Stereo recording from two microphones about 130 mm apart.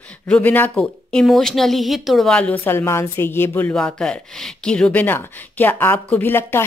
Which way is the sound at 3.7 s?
5° left (ahead or behind).